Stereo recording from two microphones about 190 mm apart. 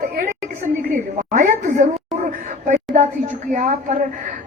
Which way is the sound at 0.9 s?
40° right (ahead or behind).